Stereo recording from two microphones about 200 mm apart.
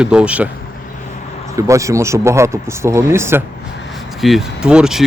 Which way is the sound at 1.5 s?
15° right (ahead or behind).